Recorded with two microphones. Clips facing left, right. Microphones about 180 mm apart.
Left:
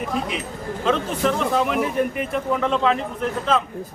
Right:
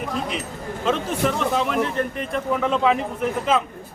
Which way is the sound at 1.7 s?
10° left (ahead or behind).